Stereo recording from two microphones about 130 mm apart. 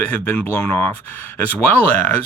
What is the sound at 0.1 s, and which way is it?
Speech, 15° left (ahead or behind).